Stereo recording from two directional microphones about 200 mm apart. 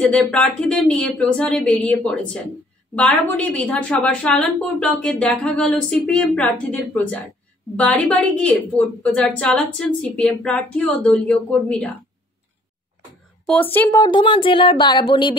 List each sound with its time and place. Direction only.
0.0 s a woman's voice: 5° left (ahead or behind)
13.7 s a woman's voice: 15° left (ahead or behind)